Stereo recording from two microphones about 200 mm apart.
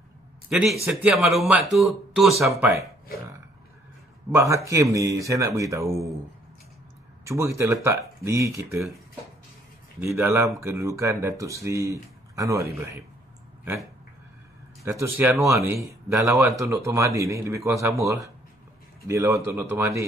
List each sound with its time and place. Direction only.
0.5 s a man's voice: 5° right (ahead or behind)
4.3 s speech: 15° right (ahead or behind)
7.2 s speech: 15° right (ahead or behind)
9.9 s speech: 15° right (ahead or behind)
14.9 s speech: 15° right (ahead or behind)